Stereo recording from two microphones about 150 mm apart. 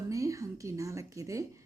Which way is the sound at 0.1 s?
20° right (ahead or behind).